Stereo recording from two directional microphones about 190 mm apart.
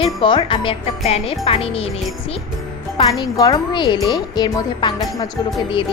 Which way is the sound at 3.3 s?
20° left (ahead or behind).